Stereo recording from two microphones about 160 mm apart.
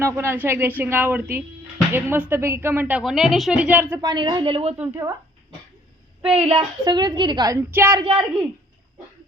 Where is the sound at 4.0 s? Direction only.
25° right (ahead or behind).